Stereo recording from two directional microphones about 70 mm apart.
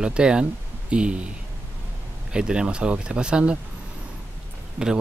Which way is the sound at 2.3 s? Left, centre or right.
Centre.